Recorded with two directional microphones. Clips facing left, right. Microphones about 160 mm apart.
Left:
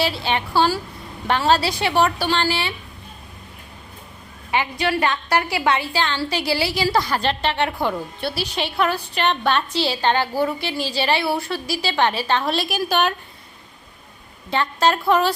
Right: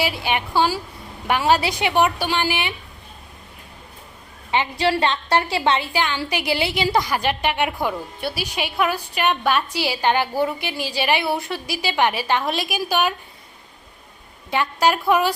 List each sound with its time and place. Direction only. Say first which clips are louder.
0.0 s a woman's voice: left 1 dB; 15° right (ahead or behind)
4.5 s a woman's voice: right 1 dB; 25° right (ahead or behind); by 13.1 s 10° right (ahead or behind)
14.5 s a woman's voice: even; 10° right (ahead or behind)